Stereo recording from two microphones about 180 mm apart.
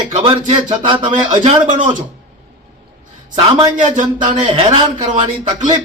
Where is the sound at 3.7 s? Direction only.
45° right (ahead or behind).